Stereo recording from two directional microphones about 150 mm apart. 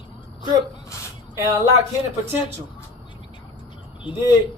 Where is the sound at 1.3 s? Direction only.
20° right (ahead or behind).